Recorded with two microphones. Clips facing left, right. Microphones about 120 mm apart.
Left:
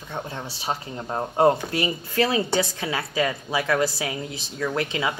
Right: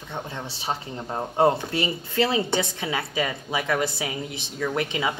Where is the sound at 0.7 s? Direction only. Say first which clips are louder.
Left 1 dB; 20° left (ahead or behind).